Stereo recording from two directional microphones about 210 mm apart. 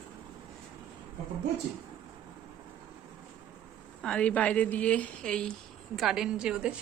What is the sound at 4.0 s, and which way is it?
A woman's voice, 5° left (ahead or behind).